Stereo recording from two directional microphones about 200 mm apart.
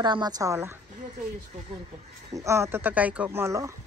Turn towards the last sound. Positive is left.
turn(degrees=-15)  # may be behind; listen again after turning